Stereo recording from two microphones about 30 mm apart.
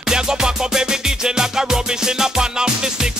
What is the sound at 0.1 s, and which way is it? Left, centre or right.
Music, right.